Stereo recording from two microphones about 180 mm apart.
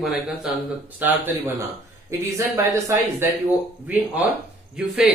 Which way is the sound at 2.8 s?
15° right (ahead or behind).